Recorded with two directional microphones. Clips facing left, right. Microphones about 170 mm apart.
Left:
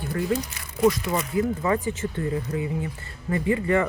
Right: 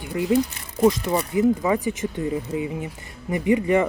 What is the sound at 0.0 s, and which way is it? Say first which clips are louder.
Speech: right 5 dB; 15° right (ahead or behind).